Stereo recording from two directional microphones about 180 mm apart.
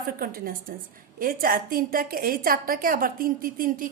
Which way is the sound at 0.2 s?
55° right (ahead or behind).